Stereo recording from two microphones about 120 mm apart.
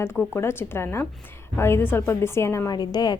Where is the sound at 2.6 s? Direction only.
35° left (ahead or behind).